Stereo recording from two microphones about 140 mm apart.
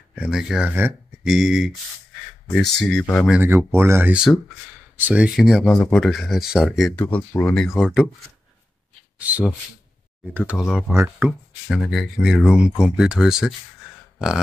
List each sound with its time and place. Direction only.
0.1 s speech: 5° right (ahead or behind)
1.2 s speech: 5° right (ahead or behind)
3.4 s speech: 15° right (ahead or behind)
7.0 s speech: 10° left (ahead or behind)
9.3 s speech: 10° right (ahead or behind)
10.6 s speech: 5° right (ahead or behind)
11.0 s speech: 15° right (ahead or behind)
11.7 s speech: centre (ahead or behind)
14.1 s a sound: 5° right (ahead or behind)